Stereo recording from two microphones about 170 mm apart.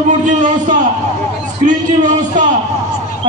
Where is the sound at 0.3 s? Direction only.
50° right (ahead or behind).